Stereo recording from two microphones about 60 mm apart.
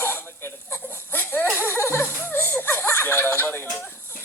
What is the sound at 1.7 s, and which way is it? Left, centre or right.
Laughter, left.